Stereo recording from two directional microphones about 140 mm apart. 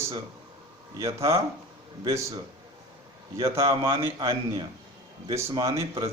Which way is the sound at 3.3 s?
20° right (ahead or behind).